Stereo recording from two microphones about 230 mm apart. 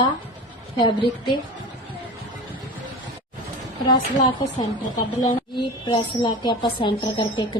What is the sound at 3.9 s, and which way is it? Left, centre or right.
A woman's voice, centre.